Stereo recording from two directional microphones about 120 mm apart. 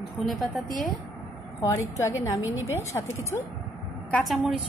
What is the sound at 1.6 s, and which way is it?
A woman's voice, 25° left (ahead or behind).